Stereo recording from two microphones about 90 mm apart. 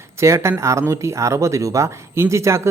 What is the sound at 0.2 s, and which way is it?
Speech, 30° right (ahead or behind).